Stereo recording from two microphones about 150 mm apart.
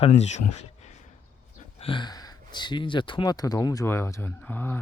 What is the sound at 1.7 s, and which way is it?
Speech, 35° left (ahead or behind).